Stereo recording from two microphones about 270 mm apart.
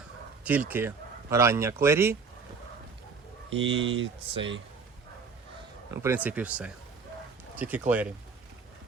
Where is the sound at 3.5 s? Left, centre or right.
Right.